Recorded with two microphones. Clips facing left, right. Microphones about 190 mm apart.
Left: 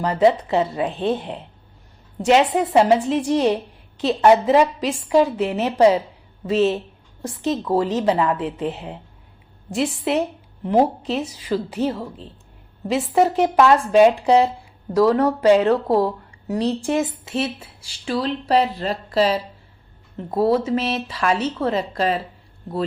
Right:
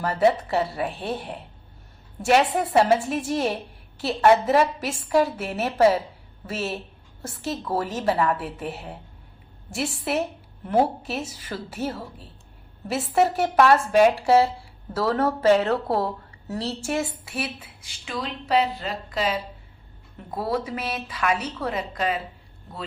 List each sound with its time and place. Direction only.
0.0 s a woman's voice: 20° left (ahead or behind)
13.1 s a woman's voice: 15° left (ahead or behind); by 22.2 s 35° left (ahead or behind)